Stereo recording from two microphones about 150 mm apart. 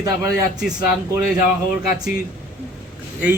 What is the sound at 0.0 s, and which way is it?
Speech, 20° right (ahead or behind).